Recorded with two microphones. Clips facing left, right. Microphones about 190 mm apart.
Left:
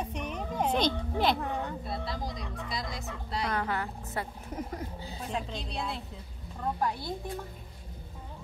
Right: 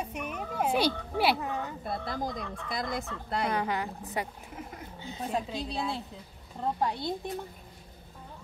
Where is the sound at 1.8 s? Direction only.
50° right (ahead or behind).